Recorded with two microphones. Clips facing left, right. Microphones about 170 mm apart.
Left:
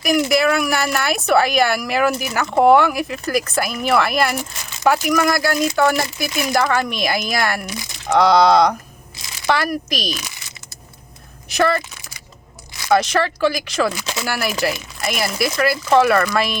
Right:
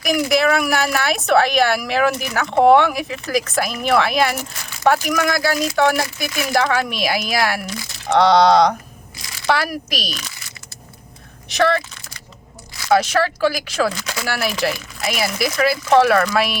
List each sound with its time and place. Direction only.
0.0 s speech: centre (ahead or behind)
11.4 s speech: centre (ahead or behind)
12.9 s speech: 5° right (ahead or behind)
14.0 s speech: 20° left (ahead or behind)
14.3 s speech: centre (ahead or behind)